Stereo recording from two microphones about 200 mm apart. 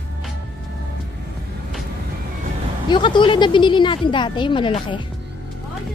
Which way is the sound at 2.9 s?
25° left (ahead or behind).